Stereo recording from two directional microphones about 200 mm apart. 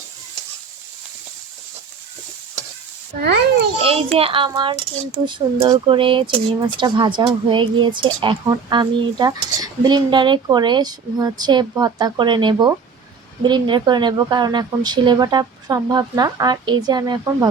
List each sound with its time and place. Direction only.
3.8 s speech: 30° right (ahead or behind)